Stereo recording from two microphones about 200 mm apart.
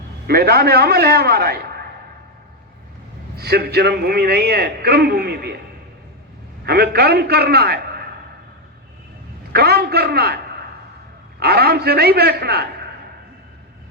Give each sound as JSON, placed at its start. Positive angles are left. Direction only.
{"t": 0.3, "sound": "a man's voice", "side_deg": -50}
{"t": 3.3, "sound": "a man's voice", "side_deg": -50}
{"t": 6.7, "sound": "a man's voice", "side_deg": -55}
{"t": 9.5, "sound": "a man's voice", "side_deg": -50}